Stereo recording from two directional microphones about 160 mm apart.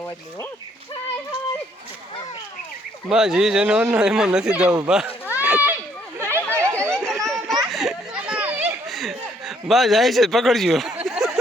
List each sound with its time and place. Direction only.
3.1 s speech: 5° right (ahead or behind)
5.3 s children playing: 10° right (ahead or behind)
6.5 s chatter: 15° right (ahead or behind)
6.9 s chatter: 5° left (ahead or behind)
7.3 s a sound: centre (ahead or behind)